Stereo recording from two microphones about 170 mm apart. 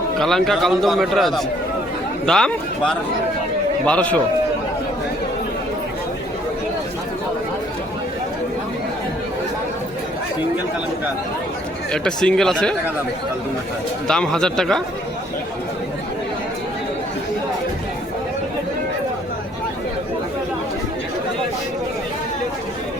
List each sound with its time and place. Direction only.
0.2 s a man's voice: centre (ahead or behind)
11.9 s a man's voice: 5° left (ahead or behind)
14.1 s a man's voice: 5° left (ahead or behind)